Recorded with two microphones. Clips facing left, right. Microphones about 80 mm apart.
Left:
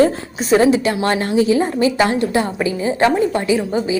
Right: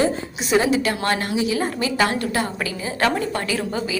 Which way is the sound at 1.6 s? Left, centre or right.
Left.